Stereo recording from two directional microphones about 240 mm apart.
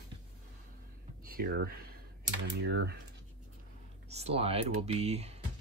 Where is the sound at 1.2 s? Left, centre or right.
Right.